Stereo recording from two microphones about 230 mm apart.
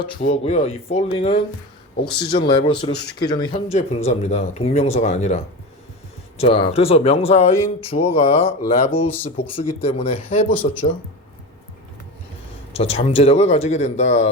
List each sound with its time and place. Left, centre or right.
0.0 s speech: left
12.7 s speech: left